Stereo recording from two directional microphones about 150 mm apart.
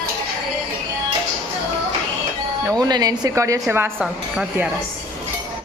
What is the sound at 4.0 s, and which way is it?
Speech, 5° right (ahead or behind).